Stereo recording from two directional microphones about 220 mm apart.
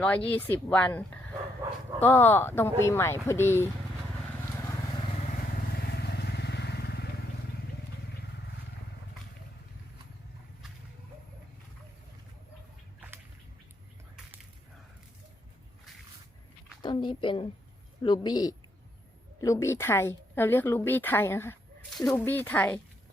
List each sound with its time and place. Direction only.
0.3 s speech: 10° left (ahead or behind)
5.9 s vehicle: 45° left (ahead or behind)
16.8 s a sound: 20° left (ahead or behind)
18.0 s a man's voice: 20° left (ahead or behind)